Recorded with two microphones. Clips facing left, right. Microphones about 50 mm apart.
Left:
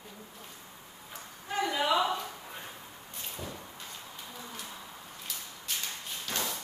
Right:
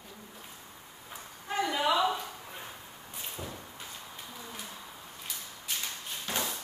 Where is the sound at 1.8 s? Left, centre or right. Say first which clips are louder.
Even; centre.